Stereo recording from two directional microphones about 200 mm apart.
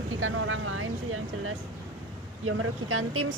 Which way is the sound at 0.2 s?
75° right (ahead or behind).